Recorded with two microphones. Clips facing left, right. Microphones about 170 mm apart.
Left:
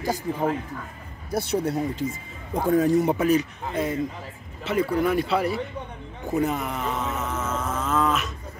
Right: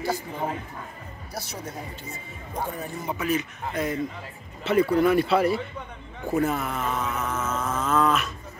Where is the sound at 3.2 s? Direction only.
35° left (ahead or behind).